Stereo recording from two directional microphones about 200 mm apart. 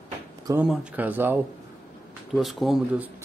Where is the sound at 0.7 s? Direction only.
5° right (ahead or behind).